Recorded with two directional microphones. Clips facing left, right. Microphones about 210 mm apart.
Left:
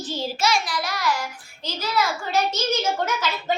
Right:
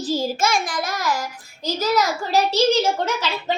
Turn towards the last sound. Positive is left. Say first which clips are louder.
# right 3 dB
turn(degrees=-30)  # may be behind; listen again after turning